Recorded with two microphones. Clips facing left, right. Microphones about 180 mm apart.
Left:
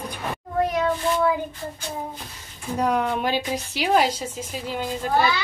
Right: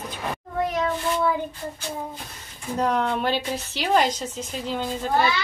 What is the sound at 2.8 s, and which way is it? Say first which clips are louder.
A woman's voice: left 1 dB; 10° left (ahead or behind).